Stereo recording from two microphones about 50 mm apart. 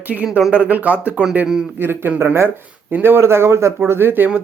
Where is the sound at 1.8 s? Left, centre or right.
Right.